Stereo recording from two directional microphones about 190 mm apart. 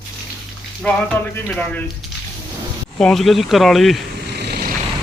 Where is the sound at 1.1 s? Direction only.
10° left (ahead or behind).